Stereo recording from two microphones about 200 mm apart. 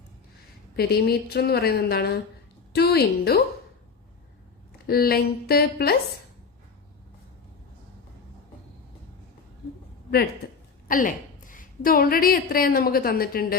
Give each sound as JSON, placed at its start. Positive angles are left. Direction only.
{"t": 0.8, "sound": "a woman's voice", "side_deg": 50}
{"t": 4.9, "sound": "a woman's voice", "side_deg": 50}
{"t": 10.8, "sound": "a woman's voice", "side_deg": 45}